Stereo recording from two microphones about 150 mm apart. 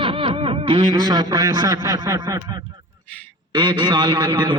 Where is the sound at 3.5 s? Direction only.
30° right (ahead or behind).